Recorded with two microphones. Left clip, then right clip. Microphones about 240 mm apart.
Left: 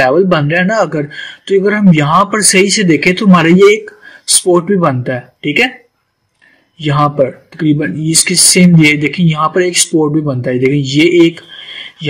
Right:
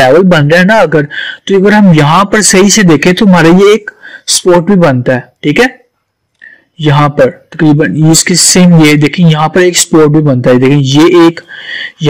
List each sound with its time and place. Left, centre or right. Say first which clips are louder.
0.0 s a man's voice: right 5 dB; right
6.8 s a man's voice: right 5 dB; right